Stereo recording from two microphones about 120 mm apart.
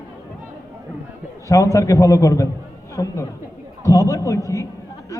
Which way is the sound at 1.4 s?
25° left (ahead or behind).